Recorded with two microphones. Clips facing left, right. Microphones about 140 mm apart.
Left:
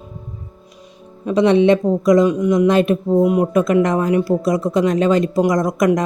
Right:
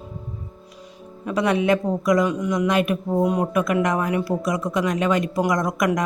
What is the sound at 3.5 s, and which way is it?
Speech, 25° left (ahead or behind).